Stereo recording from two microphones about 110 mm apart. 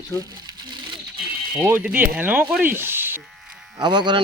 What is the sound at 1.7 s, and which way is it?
Speech, 15° right (ahead or behind).